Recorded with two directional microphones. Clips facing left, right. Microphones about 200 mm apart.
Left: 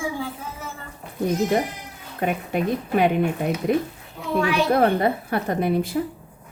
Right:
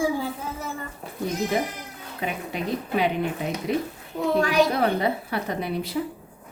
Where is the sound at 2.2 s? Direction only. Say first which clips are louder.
Left 6 dB; 50° left (ahead or behind).